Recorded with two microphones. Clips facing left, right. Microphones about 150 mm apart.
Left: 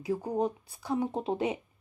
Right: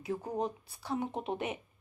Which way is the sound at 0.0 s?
30° left (ahead or behind).